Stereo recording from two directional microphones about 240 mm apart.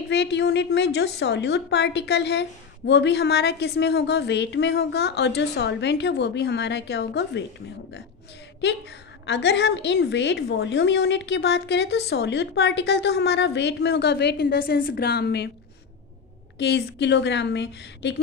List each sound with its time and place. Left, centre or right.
0.1 s a woman's voice: left
8.6 s a woman's voice: left
16.5 s a woman's voice: left